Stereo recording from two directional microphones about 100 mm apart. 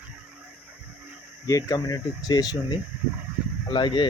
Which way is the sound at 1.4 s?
35° left (ahead or behind).